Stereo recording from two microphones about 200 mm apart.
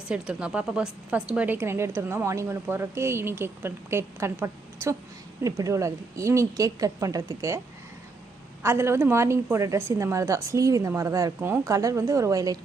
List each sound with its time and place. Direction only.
0.1 s speech: 5° right (ahead or behind)
8.6 s speech: 15° right (ahead or behind)